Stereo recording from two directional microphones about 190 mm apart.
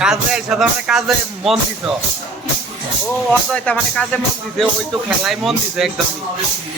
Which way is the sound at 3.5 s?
5° left (ahead or behind).